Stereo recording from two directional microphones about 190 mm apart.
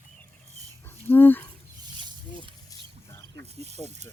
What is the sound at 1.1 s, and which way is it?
Speech, 10° left (ahead or behind).